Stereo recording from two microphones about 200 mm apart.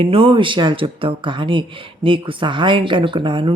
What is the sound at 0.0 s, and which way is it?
Speech, 30° right (ahead or behind).